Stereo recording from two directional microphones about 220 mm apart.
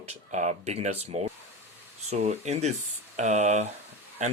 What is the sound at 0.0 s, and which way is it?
Speech, 30° right (ahead or behind).